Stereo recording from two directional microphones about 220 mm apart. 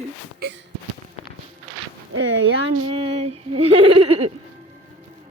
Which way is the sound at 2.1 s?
65° right (ahead or behind).